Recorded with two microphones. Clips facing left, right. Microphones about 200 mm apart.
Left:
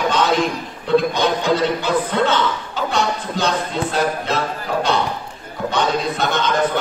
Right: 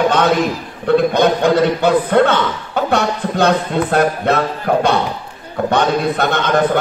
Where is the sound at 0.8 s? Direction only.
60° right (ahead or behind).